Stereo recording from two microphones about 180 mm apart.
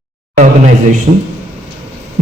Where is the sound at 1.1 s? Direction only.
35° right (ahead or behind).